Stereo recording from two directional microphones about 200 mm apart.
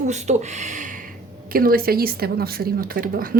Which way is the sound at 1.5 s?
45° right (ahead or behind).